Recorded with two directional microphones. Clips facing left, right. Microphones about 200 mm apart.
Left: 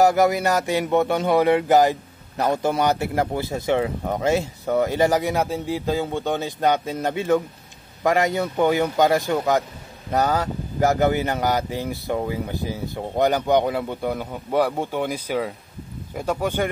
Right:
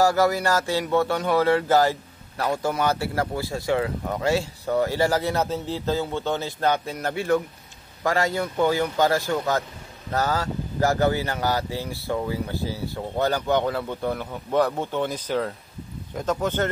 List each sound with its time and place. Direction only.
0.0 s speech: 20° left (ahead or behind)